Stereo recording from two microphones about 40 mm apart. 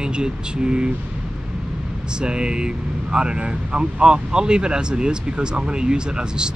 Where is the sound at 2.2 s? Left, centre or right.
Right.